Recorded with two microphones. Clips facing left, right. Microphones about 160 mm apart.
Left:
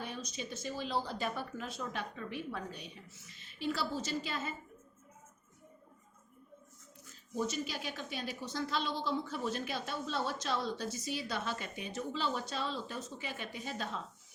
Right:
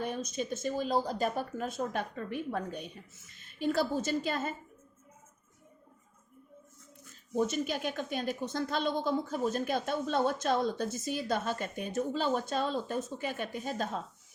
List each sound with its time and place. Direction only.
0.0 s a woman's voice: 50° right (ahead or behind)
7.3 s a woman's voice: 55° right (ahead or behind)